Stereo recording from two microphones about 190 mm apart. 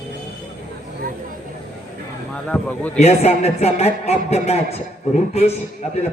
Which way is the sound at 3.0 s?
35° left (ahead or behind).